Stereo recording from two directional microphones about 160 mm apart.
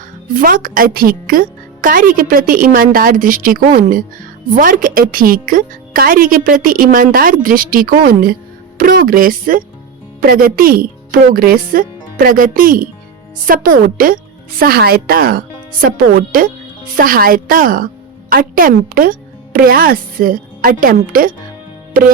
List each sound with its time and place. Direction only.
0.3 s speech: 60° right (ahead or behind)